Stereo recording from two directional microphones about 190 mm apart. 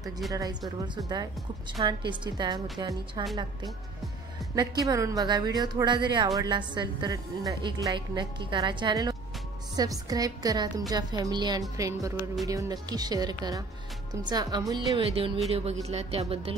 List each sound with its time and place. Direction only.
0.3 s a woman's voice: 20° right (ahead or behind)
4.6 s a woman's voice: 20° right (ahead or behind)